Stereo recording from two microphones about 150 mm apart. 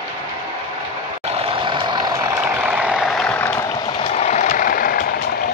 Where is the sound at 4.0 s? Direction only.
45° left (ahead or behind); by 5.1 s 80° left.